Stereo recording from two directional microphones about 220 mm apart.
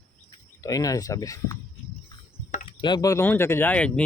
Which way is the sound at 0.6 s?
15° left (ahead or behind).